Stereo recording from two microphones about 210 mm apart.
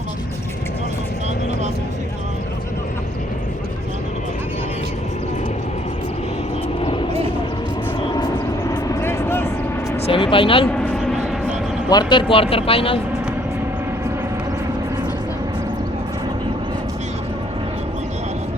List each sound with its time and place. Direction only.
8.0 s vehicle: 20° left (ahead or behind)
10.1 s a sound: 25° left (ahead or behind)
10.7 s vehicle: 5° left (ahead or behind)
11.9 s speech: 20° left (ahead or behind)